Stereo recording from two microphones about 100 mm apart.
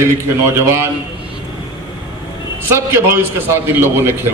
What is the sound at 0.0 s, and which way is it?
Speech, 30° right (ahead or behind).